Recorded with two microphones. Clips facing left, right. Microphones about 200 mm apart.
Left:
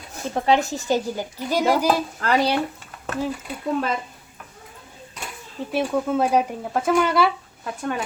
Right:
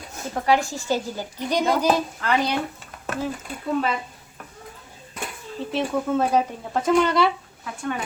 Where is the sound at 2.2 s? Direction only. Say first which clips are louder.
Left 4 dB; 35° left (ahead or behind).